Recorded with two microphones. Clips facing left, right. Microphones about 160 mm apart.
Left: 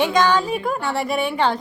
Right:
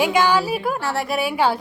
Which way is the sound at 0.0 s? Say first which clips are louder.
Even; 10° right (ahead or behind).